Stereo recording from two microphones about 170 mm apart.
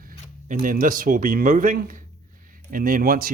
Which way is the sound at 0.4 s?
55° right (ahead or behind).